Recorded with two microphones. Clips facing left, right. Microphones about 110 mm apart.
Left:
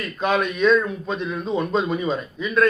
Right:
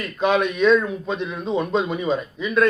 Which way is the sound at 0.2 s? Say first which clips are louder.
Right 2 dB; 15° right (ahead or behind).